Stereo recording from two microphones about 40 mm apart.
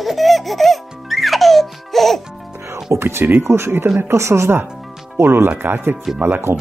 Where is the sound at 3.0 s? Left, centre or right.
Right.